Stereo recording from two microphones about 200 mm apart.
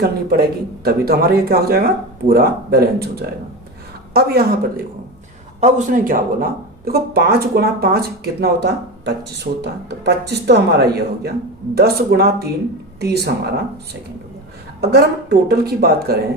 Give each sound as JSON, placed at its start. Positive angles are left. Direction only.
{"t": 0.0, "sound": "speech", "side_deg": -50}
{"t": 5.5, "sound": "speech", "side_deg": -35}
{"t": 14.8, "sound": "speech", "side_deg": -55}